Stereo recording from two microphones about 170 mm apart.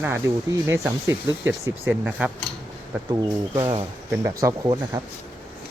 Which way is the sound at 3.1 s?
20° right (ahead or behind).